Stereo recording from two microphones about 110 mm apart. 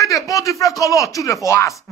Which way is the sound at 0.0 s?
30° left (ahead or behind).